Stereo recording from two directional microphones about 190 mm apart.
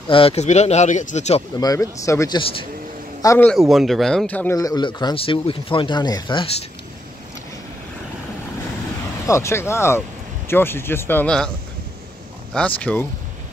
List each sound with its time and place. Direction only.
0.1 s speech: 30° left (ahead or behind)
1.6 s a man's voice: 15° left (ahead or behind)
3.5 s speech: centre (ahead or behind)
4.6 s speech: 20° left (ahead or behind)
9.2 s speech: 15° left (ahead or behind)
12.5 s speech: 5° left (ahead or behind)